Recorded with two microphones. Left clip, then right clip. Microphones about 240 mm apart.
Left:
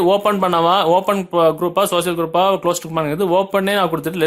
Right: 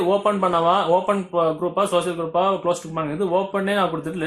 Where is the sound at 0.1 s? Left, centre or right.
Left.